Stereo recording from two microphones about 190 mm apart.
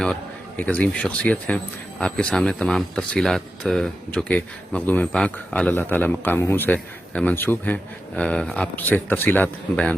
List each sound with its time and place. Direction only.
0.0 s speech: 5° left (ahead or behind)